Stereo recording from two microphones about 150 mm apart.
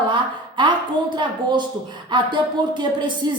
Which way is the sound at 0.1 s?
30° right (ahead or behind).